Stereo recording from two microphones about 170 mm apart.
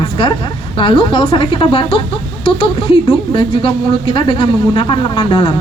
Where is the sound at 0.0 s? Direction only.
30° left (ahead or behind).